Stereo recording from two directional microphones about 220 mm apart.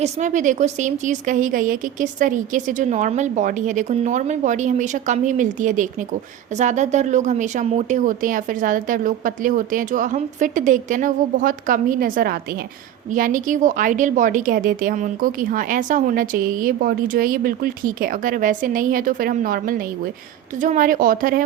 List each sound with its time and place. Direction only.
0.0 s a woman's voice: 35° right (ahead or behind)